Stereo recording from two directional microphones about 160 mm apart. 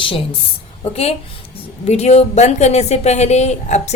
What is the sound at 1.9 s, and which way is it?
A woman's voice, 45° left (ahead or behind).